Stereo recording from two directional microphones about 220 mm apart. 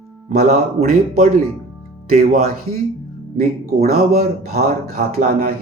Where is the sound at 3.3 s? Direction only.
40° right (ahead or behind).